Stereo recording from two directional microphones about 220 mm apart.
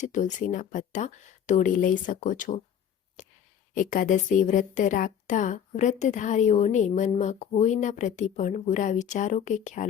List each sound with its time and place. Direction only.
0.0 s a woman's voice: 35° left (ahead or behind)
3.2 s a sound: 35° left (ahead or behind)
3.8 s a woman's voice: 35° left (ahead or behind)